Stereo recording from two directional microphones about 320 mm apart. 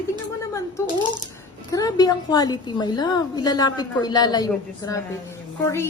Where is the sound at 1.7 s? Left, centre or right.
Centre.